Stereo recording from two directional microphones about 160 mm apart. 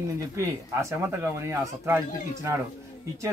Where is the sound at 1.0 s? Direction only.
15° right (ahead or behind).